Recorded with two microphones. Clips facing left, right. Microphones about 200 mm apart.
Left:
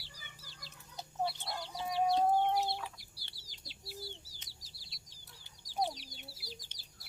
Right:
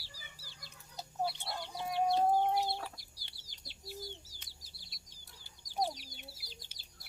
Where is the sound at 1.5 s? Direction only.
5° right (ahead or behind).